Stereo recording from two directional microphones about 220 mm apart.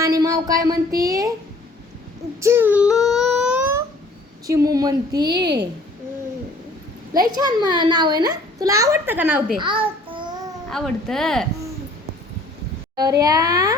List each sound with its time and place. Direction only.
0.0 s speech: 15° right (ahead or behind)
2.4 s a sound: 10° right (ahead or behind)
4.4 s a child's voice: 15° right (ahead or behind)
7.1 s a child's voice: 15° right (ahead or behind)
9.6 s child singing: 25° right (ahead or behind)
10.7 s speech: centre (ahead or behind)
13.0 s a child's voice: 15° right (ahead or behind)